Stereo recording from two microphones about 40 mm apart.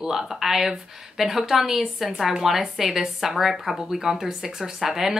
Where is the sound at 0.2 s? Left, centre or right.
Centre.